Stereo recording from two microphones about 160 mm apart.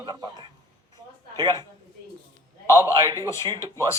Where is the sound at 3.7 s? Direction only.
20° left (ahead or behind).